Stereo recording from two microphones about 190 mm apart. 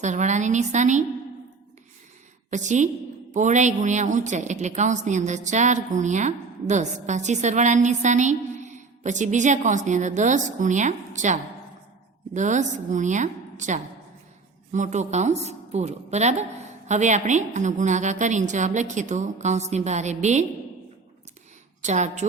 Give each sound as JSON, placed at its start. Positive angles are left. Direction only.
{"t": 0.0, "sound": "a woman's voice", "side_deg": -40}
{"t": 2.5, "sound": "a woman's voice", "side_deg": -40}
{"t": 21.8, "sound": "a woman's voice", "side_deg": -35}